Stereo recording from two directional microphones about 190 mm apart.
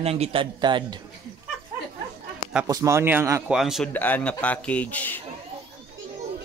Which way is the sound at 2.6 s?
15° right (ahead or behind).